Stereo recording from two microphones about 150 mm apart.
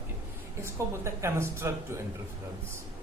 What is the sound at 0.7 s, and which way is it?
Speech, 20° right (ahead or behind).